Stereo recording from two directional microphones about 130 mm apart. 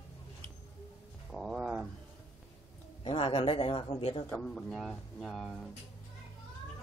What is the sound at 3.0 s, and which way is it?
Speech, 50° left (ahead or behind).